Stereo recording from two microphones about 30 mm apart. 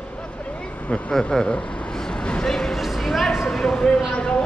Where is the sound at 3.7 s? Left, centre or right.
Left.